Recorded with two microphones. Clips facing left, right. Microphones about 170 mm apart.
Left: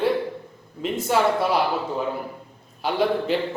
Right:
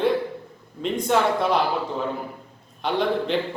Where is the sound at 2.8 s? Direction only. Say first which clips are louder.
Left 1 dB; 5° left (ahead or behind).